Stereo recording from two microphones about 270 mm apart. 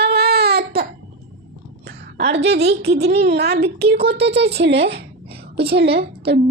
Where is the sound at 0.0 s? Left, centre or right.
Right.